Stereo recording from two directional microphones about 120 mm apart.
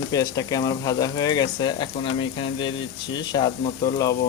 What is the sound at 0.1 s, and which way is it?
Speech, 30° left (ahead or behind).